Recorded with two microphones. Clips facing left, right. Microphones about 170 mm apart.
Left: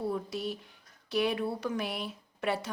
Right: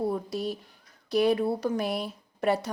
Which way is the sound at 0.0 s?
40° right (ahead or behind).